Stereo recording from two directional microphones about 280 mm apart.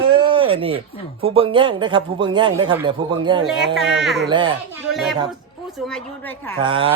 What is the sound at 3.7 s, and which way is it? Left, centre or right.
Speech, centre.